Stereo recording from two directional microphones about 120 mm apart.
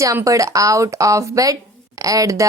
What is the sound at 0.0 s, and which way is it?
A woman's voice, 25° right (ahead or behind).